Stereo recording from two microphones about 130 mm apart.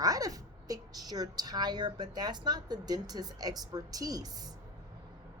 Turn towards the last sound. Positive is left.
turn(degrees=-30)  # may be behind; listen again after turning